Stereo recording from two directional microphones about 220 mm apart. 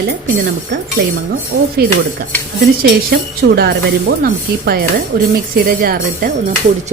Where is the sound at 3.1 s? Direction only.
45° right (ahead or behind).